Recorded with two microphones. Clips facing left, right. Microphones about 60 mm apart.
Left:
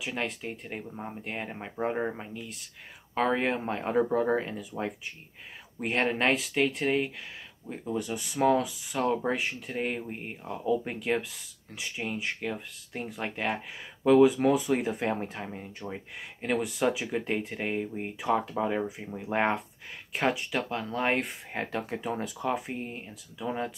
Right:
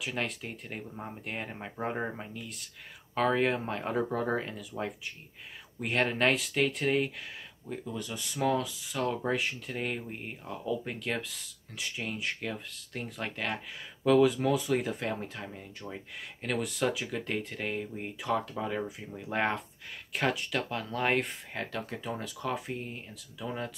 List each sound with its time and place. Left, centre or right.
0.0 s speech: centre
7.7 s speech: left
9.2 s speech: centre
21.5 s speech: left